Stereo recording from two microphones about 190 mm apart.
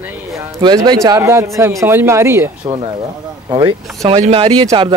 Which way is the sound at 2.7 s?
25° right (ahead or behind).